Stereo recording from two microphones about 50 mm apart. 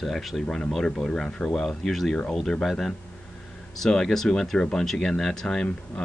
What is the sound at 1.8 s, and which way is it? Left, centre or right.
Speech, centre.